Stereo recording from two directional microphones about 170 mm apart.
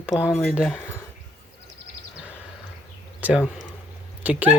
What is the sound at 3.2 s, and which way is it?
Speech, 10° right (ahead or behind).